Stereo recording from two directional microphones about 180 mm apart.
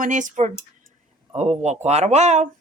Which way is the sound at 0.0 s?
45° right (ahead or behind).